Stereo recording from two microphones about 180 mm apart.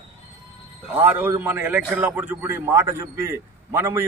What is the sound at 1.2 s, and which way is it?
A man's voice, 10° right (ahead or behind).